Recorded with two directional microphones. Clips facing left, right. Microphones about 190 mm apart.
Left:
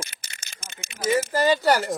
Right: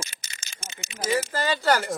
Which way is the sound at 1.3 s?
20° left (ahead or behind).